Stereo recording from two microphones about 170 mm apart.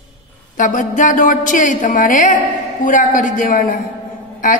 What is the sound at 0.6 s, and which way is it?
A woman's voice, 50° left (ahead or behind).